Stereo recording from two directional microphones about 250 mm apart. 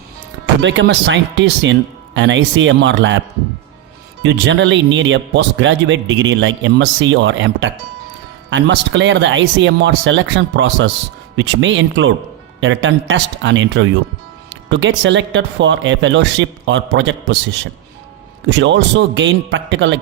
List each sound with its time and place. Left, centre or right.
0.6 s speech: right
4.2 s speech: right
18.4 s speech: right